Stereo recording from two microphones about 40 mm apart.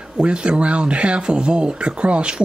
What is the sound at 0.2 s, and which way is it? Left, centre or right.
Speech, right.